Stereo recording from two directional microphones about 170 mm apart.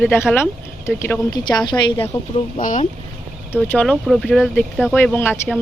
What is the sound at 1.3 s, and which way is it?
Speech, 25° left (ahead or behind).